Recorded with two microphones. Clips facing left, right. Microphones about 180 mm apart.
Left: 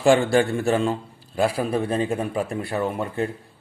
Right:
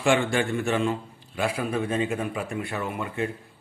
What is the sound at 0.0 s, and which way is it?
Speech, 35° left (ahead or behind).